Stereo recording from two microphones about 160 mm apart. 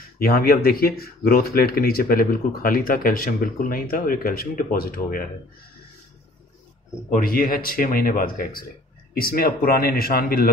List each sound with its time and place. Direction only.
0.2 s speech: 70° left (ahead or behind)
7.1 s speech: 65° left (ahead or behind)